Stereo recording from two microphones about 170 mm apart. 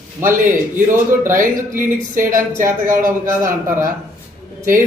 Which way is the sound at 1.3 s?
50° right (ahead or behind).